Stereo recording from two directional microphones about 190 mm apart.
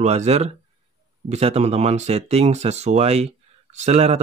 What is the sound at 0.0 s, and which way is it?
Speech, 35° right (ahead or behind).